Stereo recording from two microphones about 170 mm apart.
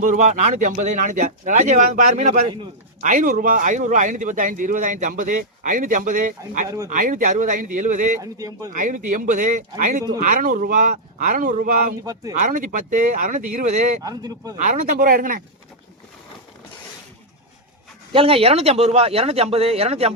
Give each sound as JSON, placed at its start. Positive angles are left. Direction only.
{"t": 0.0, "sound": "speech", "side_deg": -45}
{"t": 8.2, "sound": "speech", "side_deg": -20}
{"t": 8.7, "sound": "speech", "side_deg": -50}
{"t": 14.0, "sound": "speech", "side_deg": -20}
{"t": 14.6, "sound": "speech", "side_deg": -50}
{"t": 18.1, "sound": "speech", "side_deg": -35}